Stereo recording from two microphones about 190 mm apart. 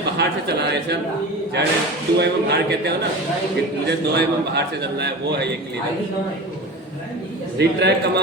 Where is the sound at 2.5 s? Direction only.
60° right (ahead or behind).